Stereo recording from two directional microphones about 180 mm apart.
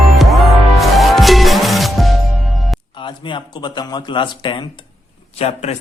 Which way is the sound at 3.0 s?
25° left (ahead or behind).